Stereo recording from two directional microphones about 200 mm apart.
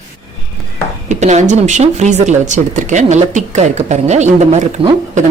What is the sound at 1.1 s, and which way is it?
Speech, 35° right (ahead or behind).